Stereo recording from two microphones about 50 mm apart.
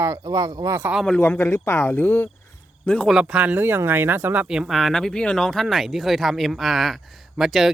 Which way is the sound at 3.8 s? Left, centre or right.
Right.